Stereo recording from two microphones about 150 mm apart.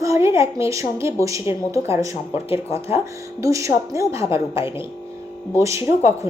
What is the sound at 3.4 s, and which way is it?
Speech, 20° right (ahead or behind).